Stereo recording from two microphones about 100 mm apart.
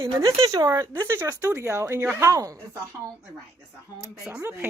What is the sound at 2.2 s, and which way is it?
Speech, 35° right (ahead or behind).